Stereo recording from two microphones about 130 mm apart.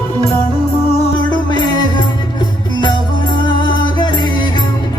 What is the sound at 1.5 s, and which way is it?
Music, 35° left (ahead or behind).